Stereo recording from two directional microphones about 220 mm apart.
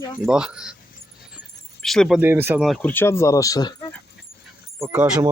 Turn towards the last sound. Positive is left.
turn(degrees=-5)  # may be behind; listen again after turning